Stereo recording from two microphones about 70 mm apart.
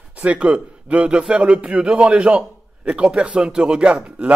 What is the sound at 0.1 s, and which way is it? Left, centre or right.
A man's voice, centre.